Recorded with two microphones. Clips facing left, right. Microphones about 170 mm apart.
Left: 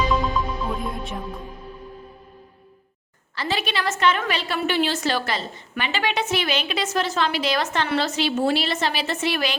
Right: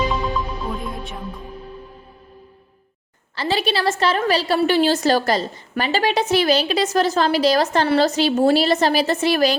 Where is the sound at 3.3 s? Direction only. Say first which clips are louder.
Right 5 dB; 30° right (ahead or behind).